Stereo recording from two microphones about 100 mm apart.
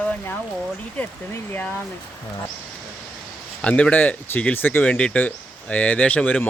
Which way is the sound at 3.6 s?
15° left (ahead or behind).